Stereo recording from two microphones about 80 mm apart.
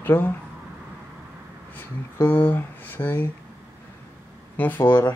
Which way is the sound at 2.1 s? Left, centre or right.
Left.